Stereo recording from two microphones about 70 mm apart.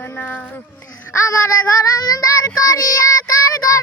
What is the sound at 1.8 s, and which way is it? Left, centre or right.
Child singing, left.